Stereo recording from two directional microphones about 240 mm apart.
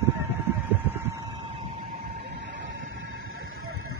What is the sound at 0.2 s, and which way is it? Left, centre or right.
Vehicle, centre.